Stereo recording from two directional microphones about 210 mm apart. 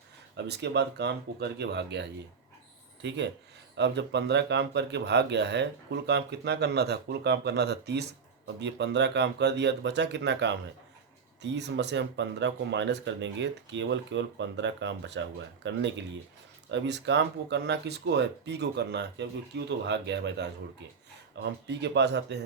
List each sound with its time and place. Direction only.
0.3 s speech: 55° right (ahead or behind)